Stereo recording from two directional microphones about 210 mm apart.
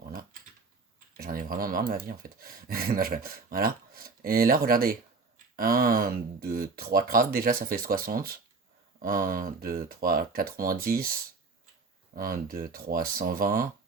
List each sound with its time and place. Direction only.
0.0 s typing: 45° right (ahead or behind)
1.1 s speech: 40° right (ahead or behind)